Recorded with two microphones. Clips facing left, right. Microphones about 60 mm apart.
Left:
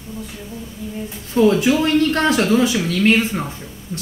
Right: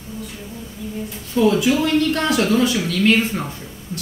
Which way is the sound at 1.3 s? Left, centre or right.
Left.